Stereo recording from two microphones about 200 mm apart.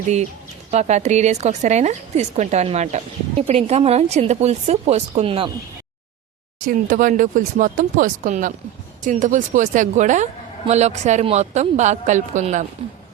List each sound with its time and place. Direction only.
0.7 s a woman's voice: 35° right (ahead or behind)
6.6 s a woman's voice: 40° right (ahead or behind)